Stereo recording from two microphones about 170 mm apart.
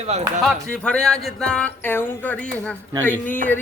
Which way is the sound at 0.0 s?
40° right (ahead or behind).